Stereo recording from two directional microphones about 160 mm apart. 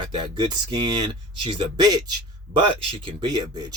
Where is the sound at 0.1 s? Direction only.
30° right (ahead or behind).